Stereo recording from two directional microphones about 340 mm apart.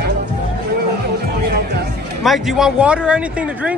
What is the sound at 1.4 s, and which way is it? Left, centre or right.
Music, right.